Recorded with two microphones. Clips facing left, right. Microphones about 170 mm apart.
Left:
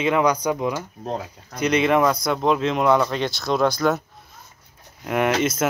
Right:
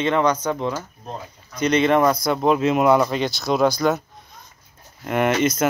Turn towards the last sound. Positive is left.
turn(degrees=0)  # may be behind; listen again after turning